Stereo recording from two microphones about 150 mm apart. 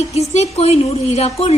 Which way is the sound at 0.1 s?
45° left (ahead or behind).